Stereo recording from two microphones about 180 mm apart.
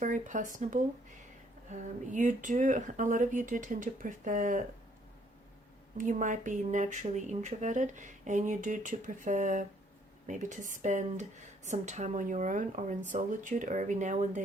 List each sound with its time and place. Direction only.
0.0 s speech: 45° right (ahead or behind)
6.0 s speech: 45° right (ahead or behind)